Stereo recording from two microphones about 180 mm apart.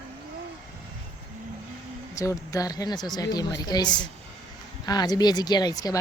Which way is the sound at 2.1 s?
15° left (ahead or behind).